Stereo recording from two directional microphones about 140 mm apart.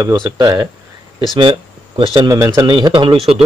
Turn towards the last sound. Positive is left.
turn(degrees=-35)  # may be behind; listen again after turning